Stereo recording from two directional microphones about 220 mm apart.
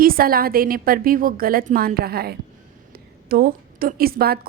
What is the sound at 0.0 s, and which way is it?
A woman's voice, 40° right (ahead or behind).